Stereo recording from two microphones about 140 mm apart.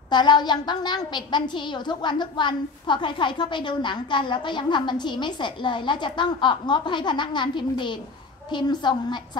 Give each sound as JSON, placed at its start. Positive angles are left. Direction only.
{"t": 0.1, "sound": "a woman's voice", "side_deg": 30}